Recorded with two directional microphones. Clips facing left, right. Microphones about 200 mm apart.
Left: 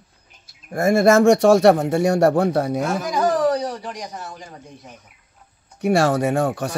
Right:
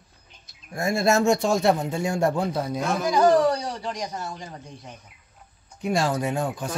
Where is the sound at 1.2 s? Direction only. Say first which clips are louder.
Left 8 dB; 80° left.